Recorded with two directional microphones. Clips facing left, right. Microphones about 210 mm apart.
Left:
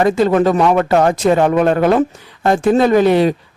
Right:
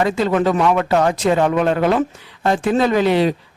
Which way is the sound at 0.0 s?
45° left (ahead or behind).